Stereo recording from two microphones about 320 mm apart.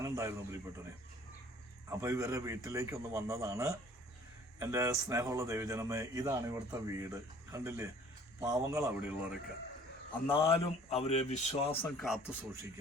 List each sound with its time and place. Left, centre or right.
0.0 s speech: centre
1.9 s a man's voice: centre
10.3 s speech: centre
11.8 s a man's voice: centre